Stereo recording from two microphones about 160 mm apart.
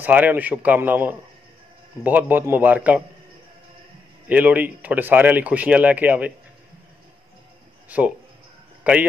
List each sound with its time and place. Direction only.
0.0 s speech: 10° right (ahead or behind)
4.3 s speech: 10° right (ahead or behind)
7.9 s speech: 10° right (ahead or behind)